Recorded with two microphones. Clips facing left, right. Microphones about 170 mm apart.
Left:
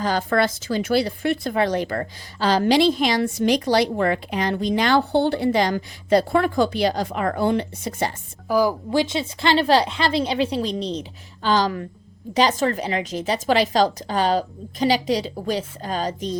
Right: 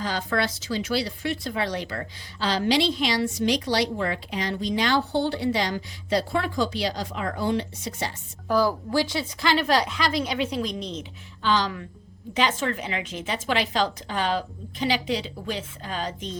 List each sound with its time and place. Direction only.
0.0 s speech: 50° left (ahead or behind)
8.4 s speech: 15° left (ahead or behind); by 16.4 s 40° left (ahead or behind)